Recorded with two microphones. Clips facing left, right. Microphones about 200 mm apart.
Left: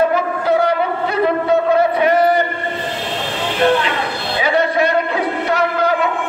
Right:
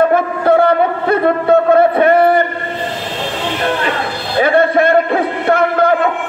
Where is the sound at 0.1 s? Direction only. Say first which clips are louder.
Right 4 dB; 55° right (ahead or behind).